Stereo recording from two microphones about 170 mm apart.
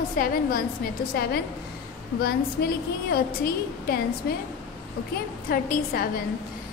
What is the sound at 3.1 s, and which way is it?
Speech, 65° left (ahead or behind).